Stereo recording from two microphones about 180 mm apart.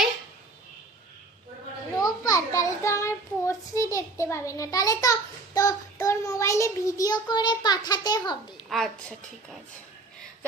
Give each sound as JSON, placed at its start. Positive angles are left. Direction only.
{"t": 2.0, "sound": "child singing", "side_deg": 20}